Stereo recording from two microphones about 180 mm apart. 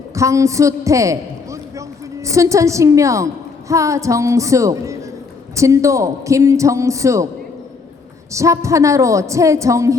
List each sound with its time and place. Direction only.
0.1 s a sound: 15° right (ahead or behind)
2.3 s a man's voice: 15° right (ahead or behind)
8.3 s a man's voice: 15° right (ahead or behind)